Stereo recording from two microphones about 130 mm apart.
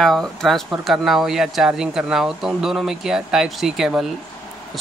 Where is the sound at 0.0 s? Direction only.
5° left (ahead or behind).